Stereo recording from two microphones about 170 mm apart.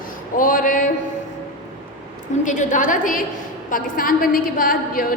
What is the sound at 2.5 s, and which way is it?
A woman's voice, 50° left (ahead or behind).